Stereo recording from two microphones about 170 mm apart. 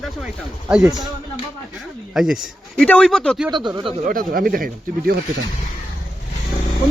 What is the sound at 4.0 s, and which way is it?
Speech, 55° right (ahead or behind).